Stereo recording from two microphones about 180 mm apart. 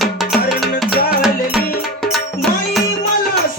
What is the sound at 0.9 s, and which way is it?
Music, 55° left (ahead or behind).